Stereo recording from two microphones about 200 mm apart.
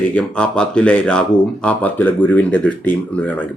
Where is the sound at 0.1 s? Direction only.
5° left (ahead or behind).